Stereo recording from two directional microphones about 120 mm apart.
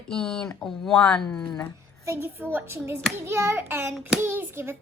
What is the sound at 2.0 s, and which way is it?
A child's voice, 20° right (ahead or behind).